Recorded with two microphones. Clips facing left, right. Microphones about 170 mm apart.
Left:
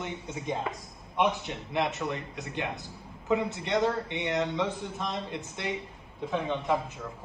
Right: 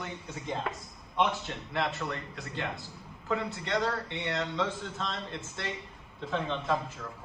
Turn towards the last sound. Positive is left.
turn(degrees=15)  # may be behind; listen again after turning